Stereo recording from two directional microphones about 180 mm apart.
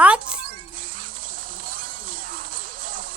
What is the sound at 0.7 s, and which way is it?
Music, 50° right (ahead or behind).